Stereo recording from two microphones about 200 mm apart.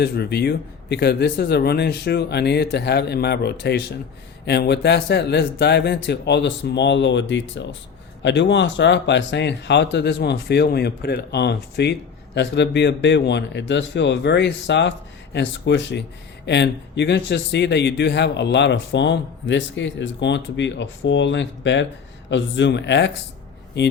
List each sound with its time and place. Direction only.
0.0 s speech: 55° left (ahead or behind)